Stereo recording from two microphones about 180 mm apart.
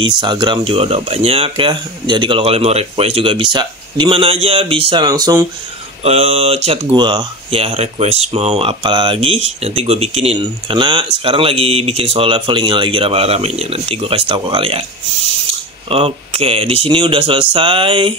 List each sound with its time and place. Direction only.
0.0 s speech: 25° right (ahead or behind)
6.0 s speech: 35° right (ahead or behind)
15.9 s speech: 30° right (ahead or behind)